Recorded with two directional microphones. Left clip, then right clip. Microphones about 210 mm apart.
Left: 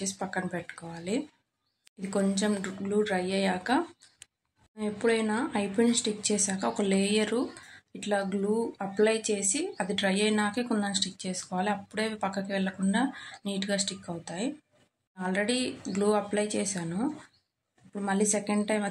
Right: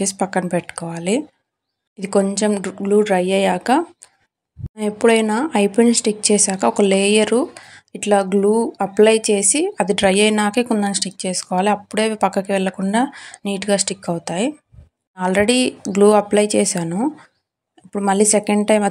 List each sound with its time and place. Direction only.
0.0 s speech: 40° right (ahead or behind)